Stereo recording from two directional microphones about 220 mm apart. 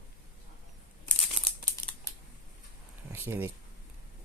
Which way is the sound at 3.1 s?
10° right (ahead or behind).